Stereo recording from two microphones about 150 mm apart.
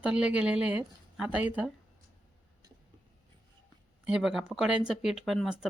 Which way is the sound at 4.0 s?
5° right (ahead or behind).